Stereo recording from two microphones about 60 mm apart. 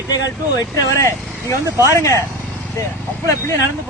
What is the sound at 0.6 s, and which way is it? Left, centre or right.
Speech, left.